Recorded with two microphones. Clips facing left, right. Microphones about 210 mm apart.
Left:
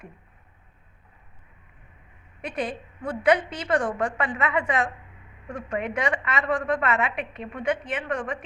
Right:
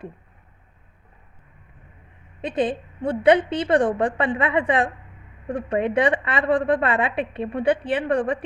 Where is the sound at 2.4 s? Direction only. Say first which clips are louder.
Right 7 dB; 25° right (ahead or behind).